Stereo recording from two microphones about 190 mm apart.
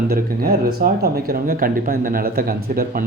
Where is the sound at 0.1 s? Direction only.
50° right (ahead or behind).